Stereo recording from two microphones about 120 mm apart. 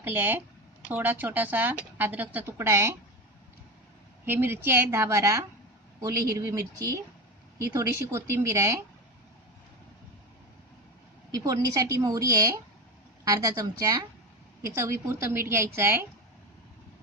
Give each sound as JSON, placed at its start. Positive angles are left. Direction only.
{"t": 0.0, "sound": "speech", "side_deg": -15}
{"t": 4.3, "sound": "a woman's voice", "side_deg": -20}
{"t": 11.3, "sound": "a woman's voice", "side_deg": -30}